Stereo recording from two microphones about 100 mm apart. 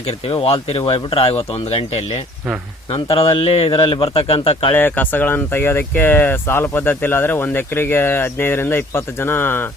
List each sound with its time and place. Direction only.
0.3 s speech: 70° left (ahead or behind)
3.2 s speech: 70° left (ahead or behind)
3.8 s speech: 55° left (ahead or behind)
4.7 s speech: 20° left (ahead or behind)